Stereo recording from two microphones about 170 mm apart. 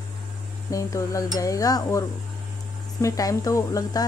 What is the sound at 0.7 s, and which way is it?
A woman's voice, 20° left (ahead or behind).